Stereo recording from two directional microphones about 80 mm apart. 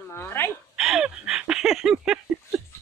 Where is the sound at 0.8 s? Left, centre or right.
Centre.